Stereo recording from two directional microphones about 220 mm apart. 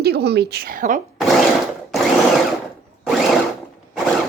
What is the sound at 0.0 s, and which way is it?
A woman's voice, 45° right (ahead or behind).